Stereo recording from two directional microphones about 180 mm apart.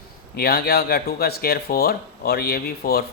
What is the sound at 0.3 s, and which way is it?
Speech, 60° left (ahead or behind).